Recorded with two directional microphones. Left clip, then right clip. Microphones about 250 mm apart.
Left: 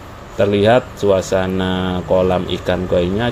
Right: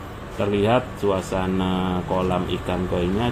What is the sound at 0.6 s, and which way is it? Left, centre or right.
Speech, left.